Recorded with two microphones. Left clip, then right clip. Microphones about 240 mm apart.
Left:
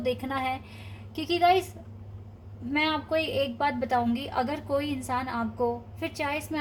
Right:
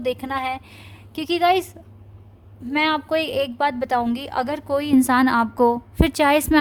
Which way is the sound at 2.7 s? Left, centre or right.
Right.